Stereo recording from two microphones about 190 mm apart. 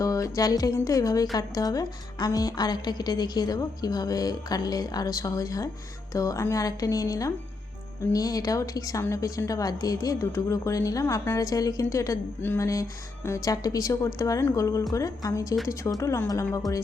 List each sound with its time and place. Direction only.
0.0 s a woman's voice: 15° left (ahead or behind)